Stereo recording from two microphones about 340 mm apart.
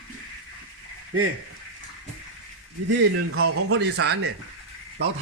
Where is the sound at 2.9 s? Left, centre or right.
Right.